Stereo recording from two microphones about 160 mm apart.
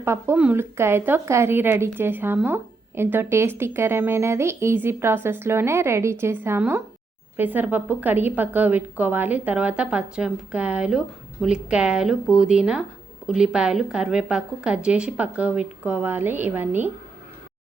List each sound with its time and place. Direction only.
0.0 s a woman's voice: 15° right (ahead or behind)